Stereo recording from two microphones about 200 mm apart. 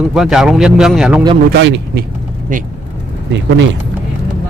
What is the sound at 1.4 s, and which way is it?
Speech, 60° right (ahead or behind).